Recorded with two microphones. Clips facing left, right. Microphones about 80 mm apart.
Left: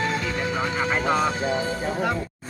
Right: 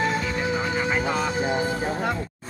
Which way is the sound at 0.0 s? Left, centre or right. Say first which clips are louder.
Right 1 dB; centre.